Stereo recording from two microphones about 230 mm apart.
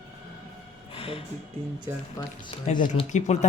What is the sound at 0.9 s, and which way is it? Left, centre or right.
Music, left.